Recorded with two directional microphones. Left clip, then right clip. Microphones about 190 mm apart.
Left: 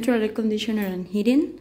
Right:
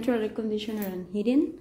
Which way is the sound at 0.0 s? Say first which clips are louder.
Left 5 dB; 10° left (ahead or behind).